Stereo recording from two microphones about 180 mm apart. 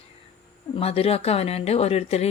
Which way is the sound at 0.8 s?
35° left (ahead or behind).